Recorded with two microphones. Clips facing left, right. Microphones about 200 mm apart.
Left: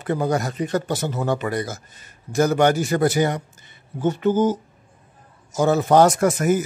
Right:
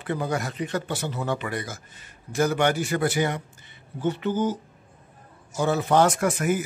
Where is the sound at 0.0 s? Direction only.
45° left (ahead or behind).